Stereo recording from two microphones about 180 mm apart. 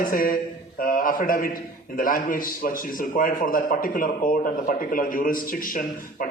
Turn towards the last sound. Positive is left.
turn(degrees=50)  # may be behind; listen again after turning